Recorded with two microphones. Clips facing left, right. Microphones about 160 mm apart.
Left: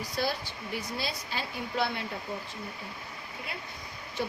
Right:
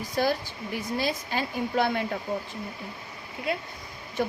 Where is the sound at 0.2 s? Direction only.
55° right (ahead or behind).